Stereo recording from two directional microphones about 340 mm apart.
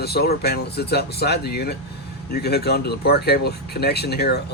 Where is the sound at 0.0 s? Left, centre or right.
Left.